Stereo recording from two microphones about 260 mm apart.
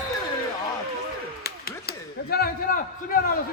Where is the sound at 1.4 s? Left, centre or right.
Left.